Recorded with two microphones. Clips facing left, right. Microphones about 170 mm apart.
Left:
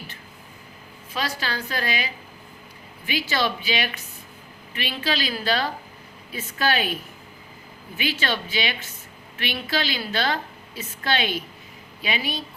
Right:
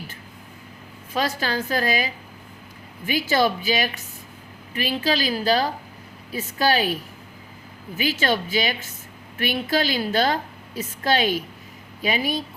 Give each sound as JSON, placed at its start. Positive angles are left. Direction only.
{"t": 1.1, "sound": "a woman's voice", "side_deg": -45}
{"t": 3.1, "sound": "a woman's voice", "side_deg": -45}